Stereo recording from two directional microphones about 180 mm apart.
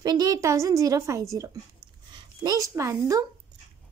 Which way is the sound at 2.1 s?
25° right (ahead or behind).